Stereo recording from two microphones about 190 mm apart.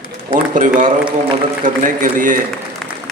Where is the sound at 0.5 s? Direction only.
45° right (ahead or behind).